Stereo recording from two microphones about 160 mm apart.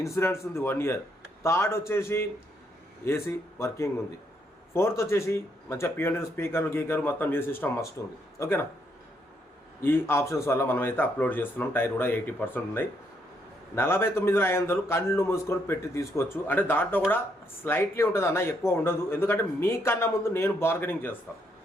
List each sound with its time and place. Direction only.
0.0 s a man's voice: 15° left (ahead or behind)
9.8 s a man's voice: 15° left (ahead or behind)